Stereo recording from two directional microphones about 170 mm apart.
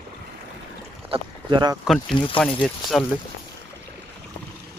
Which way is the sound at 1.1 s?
25° right (ahead or behind).